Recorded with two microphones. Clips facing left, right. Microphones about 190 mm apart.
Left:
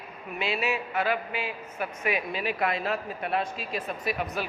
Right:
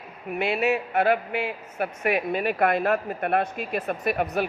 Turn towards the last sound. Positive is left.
turn(degrees=-55)  # may be behind; listen again after turning